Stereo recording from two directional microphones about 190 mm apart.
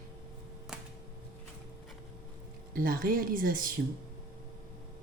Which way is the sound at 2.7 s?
50° right (ahead or behind).